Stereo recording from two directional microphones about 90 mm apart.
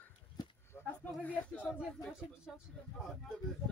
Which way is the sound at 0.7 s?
20° left (ahead or behind).